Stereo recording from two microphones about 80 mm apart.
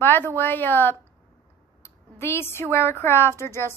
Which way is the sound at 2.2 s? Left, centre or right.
Left.